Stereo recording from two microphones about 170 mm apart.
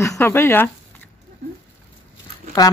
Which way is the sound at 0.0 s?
15° left (ahead or behind).